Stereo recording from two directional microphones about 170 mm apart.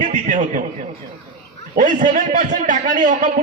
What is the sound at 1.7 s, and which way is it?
A man's voice, 50° right (ahead or behind).